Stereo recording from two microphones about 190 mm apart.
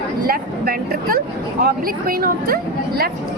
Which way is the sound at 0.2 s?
50° right (ahead or behind).